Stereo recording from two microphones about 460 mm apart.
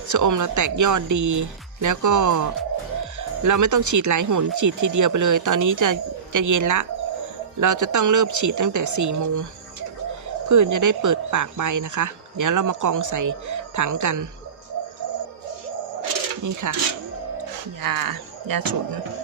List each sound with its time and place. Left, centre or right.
0.1 s speech: right
10.5 s speech: right
16.4 s speech: right
17.8 s speech: right